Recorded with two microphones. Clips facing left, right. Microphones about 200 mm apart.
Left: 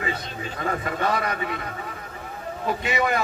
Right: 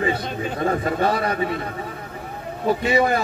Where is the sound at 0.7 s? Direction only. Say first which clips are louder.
Right 4 dB; 30° right (ahead or behind).